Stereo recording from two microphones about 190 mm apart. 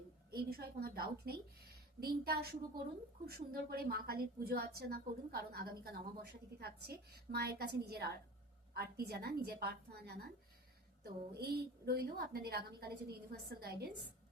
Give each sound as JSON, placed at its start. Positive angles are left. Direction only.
{"t": 0.3, "sound": "a woman's voice", "side_deg": -55}